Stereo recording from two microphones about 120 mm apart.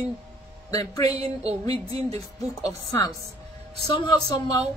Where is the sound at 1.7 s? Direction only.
55° right (ahead or behind).